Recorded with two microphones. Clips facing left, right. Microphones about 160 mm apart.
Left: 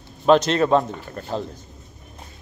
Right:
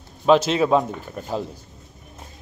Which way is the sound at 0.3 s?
5° right (ahead or behind).